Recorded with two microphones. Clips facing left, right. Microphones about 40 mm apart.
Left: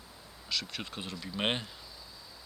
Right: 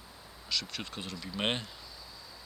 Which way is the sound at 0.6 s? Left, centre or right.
Left.